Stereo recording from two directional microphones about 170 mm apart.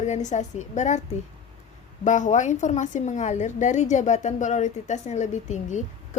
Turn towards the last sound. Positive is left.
turn(degrees=45)  # may be behind; listen again after turning